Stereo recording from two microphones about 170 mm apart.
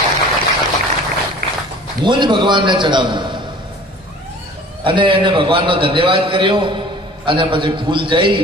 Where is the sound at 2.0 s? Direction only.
25° right (ahead or behind).